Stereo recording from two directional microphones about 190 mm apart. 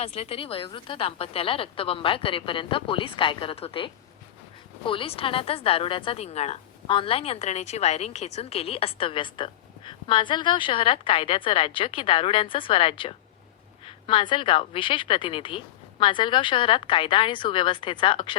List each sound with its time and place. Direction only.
0.0 s a woman's voice: 30° left (ahead or behind)